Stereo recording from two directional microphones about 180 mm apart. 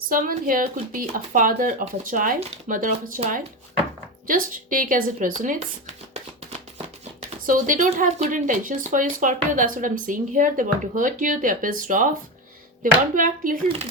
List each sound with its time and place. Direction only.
0.1 s speech: 50° right (ahead or behind)
4.3 s speech: 50° right (ahead or behind)
7.4 s speech: 45° right (ahead or behind)